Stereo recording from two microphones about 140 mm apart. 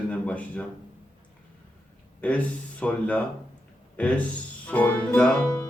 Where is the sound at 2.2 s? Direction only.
10° left (ahead or behind).